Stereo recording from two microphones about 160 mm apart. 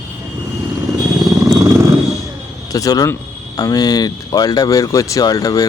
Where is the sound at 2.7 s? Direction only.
25° left (ahead or behind).